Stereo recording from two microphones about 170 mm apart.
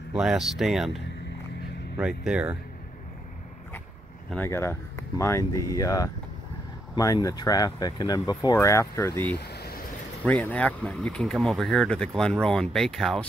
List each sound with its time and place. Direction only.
0.1 s speech: centre (ahead or behind)
4.3 s speech: 10° left (ahead or behind)
9.4 s vehicle: 70° left (ahead or behind)
10.2 s speech: 10° left (ahead or behind)